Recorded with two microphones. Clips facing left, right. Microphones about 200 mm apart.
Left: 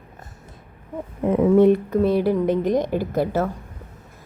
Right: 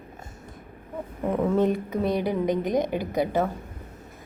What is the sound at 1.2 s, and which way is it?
Speech, 15° left (ahead or behind).